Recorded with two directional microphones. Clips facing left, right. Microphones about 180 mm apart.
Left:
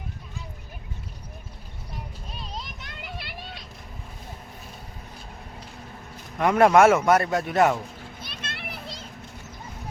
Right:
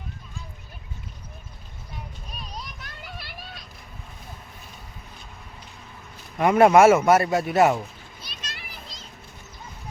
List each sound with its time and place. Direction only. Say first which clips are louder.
2.3 s children playing: left 1 dB; 25° left (ahead or behind)
3.4 s a sound: left 2 dB; 25° left (ahead or behind)
6.4 s speech: right 2 dB; 5° right (ahead or behind)
8.2 s children playing: left 4 dB; 55° left (ahead or behind)